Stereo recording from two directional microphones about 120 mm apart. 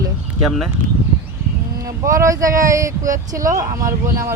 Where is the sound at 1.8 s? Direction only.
25° right (ahead or behind).